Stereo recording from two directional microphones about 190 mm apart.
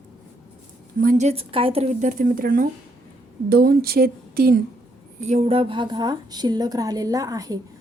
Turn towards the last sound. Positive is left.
turn(degrees=-20)  # may be behind; listen again after turning